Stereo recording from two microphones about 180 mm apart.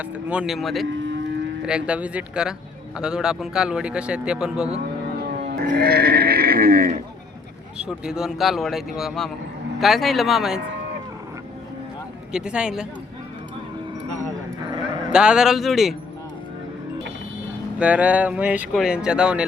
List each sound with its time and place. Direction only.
0.0 s speech: 5° right (ahead or behind)
0.9 s cattle: 90° right
1.6 s speech: 5° right (ahead or behind)
5.5 s speech: 65° right (ahead or behind)
7.8 s speech: 5° right (ahead or behind)
12.3 s speech: 5° right (ahead or behind)
15.1 s speech: 5° right (ahead or behind)
17.7 s speech: 5° right (ahead or behind)